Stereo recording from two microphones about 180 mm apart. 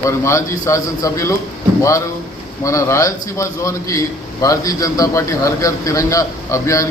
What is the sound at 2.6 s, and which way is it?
A man's voice, 15° left (ahead or behind).